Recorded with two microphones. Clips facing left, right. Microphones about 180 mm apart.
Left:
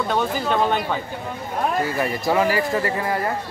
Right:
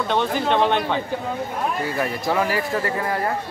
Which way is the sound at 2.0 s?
5° left (ahead or behind).